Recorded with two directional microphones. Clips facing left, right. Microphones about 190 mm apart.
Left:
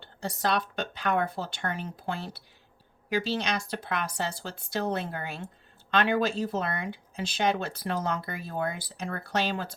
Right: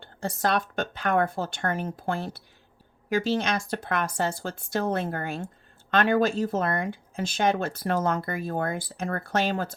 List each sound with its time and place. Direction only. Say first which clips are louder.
0.0 s speech: right 3 dB; 50° right (ahead or behind)